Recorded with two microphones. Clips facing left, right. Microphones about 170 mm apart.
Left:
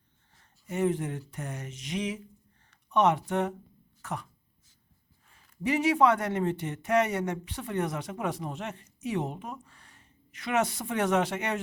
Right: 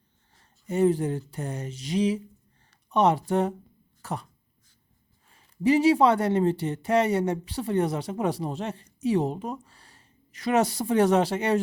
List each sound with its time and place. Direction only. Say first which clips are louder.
0.7 s speech: right 6 dB; 35° right (ahead or behind)
4.0 s throat clearing: right 3 dB; 35° right (ahead or behind)
5.3 s speech: right 7 dB; 30° right (ahead or behind)